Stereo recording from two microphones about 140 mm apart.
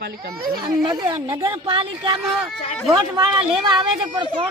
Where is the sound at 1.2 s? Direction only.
20° right (ahead or behind).